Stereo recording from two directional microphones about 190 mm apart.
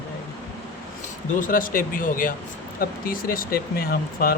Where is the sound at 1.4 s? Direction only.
45° left (ahead or behind).